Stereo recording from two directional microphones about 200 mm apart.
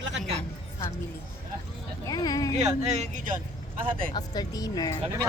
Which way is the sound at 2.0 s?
20° left (ahead or behind).